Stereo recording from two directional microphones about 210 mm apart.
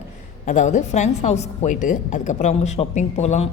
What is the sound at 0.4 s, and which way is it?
A woman's voice, 35° left (ahead or behind).